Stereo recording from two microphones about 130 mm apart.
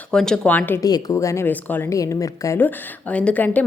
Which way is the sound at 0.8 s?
30° left (ahead or behind).